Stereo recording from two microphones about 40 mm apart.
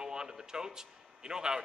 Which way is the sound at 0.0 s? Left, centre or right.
Centre.